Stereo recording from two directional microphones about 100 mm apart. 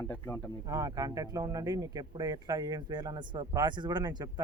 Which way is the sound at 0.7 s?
35° right (ahead or behind).